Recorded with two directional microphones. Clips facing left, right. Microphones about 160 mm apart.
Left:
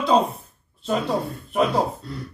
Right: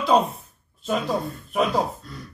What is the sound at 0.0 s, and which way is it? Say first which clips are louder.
Speech: even; centre (ahead or behind).